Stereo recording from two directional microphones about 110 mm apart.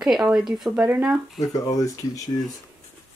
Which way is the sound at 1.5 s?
30° left (ahead or behind).